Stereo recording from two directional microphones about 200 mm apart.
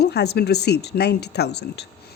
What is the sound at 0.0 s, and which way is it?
Speech, 55° left (ahead or behind).